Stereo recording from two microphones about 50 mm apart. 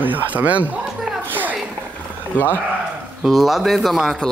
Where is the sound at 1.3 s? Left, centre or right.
Right.